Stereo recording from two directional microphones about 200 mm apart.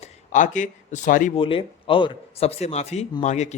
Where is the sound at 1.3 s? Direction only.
25° left (ahead or behind).